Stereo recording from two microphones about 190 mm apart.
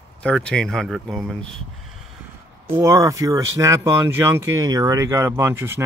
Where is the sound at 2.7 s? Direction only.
15° right (ahead or behind).